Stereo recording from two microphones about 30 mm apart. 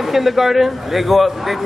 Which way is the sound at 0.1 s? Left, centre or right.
Centre.